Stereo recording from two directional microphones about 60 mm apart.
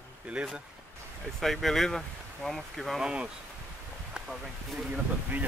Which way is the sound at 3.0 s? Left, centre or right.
Centre.